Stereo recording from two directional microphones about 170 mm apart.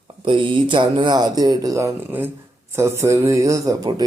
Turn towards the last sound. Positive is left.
turn(degrees=-20)  # may be behind; listen again after turning